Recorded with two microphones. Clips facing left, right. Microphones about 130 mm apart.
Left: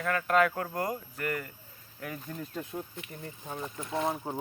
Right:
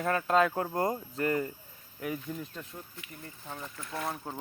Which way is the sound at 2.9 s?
20° left (ahead or behind).